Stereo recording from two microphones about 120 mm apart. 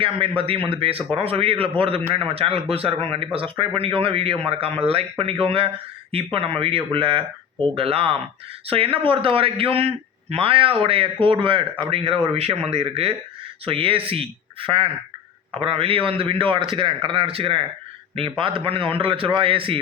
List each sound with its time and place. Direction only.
0.0 s a man's voice: 50° right (ahead or behind)